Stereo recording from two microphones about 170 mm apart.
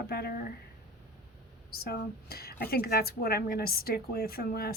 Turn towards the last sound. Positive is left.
turn(degrees=65)  # may be behind; listen again after turning